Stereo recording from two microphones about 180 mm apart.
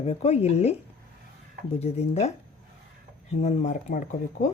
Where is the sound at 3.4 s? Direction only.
40° left (ahead or behind).